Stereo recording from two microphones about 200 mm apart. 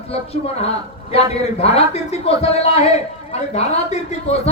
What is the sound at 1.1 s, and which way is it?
A man's voice, 30° left (ahead or behind).